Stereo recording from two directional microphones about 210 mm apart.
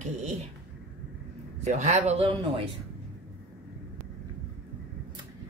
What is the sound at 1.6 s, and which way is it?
A woman's voice, 35° right (ahead or behind).